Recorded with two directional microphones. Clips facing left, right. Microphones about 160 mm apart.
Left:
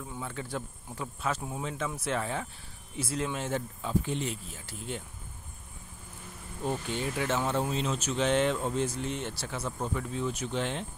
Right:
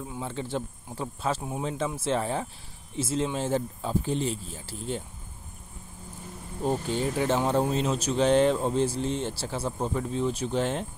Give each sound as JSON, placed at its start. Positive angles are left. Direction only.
{"t": 0.2, "sound": "speech", "side_deg": -25}
{"t": 6.6, "sound": "speech", "side_deg": -35}